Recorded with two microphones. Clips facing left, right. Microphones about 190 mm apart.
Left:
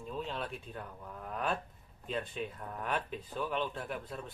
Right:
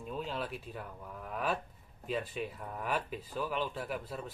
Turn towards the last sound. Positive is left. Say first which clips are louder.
# right 2 dB
turn(degrees=-5)  # may be behind; listen again after turning